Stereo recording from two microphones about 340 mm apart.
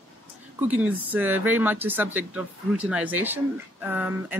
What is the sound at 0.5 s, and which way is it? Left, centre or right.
Speech, centre.